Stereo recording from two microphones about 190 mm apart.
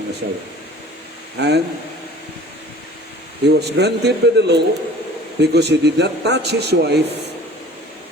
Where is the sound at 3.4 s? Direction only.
60° right (ahead or behind).